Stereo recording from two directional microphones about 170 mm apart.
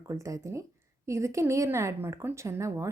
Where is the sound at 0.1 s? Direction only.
20° right (ahead or behind).